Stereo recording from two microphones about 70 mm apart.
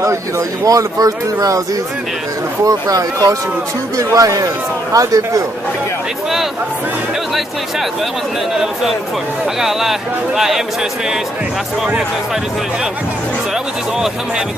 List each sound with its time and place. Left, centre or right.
0.7 s speech: right
2.6 s speech: right
9.6 s speech: centre